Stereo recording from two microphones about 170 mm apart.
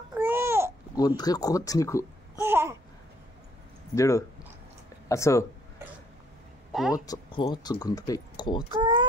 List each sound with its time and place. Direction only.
0.1 s babbling: 10° right (ahead or behind)
0.9 s speech: 20° left (ahead or behind)
2.4 s babbling: 15° right (ahead or behind)
3.9 s speech: 15° left (ahead or behind)
6.7 s a sound: centre (ahead or behind)
7.1 s speech: 25° left (ahead or behind)
8.7 s a sound: 30° right (ahead or behind)